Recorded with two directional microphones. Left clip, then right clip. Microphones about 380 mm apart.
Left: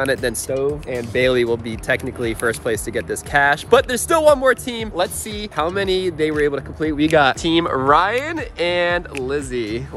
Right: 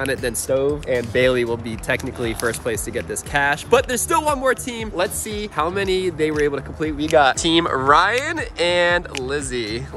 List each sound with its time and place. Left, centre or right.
0.0 s speech: centre
7.1 s speech: left
7.3 s speech: centre